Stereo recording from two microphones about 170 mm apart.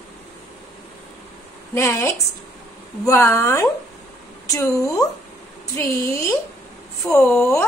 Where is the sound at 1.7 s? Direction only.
15° left (ahead or behind).